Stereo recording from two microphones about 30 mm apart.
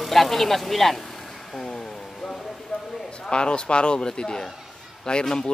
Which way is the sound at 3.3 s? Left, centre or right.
Left.